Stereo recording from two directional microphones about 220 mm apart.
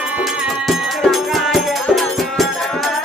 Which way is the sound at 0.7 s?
Centre (ahead or behind).